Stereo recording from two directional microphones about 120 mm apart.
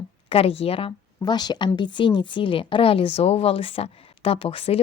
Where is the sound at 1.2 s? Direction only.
35° left (ahead or behind); by 4.8 s 55° left (ahead or behind).